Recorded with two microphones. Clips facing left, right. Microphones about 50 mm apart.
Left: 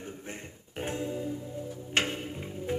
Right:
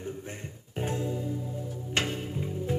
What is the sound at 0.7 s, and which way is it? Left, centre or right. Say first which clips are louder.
Music: right 2 dB; left.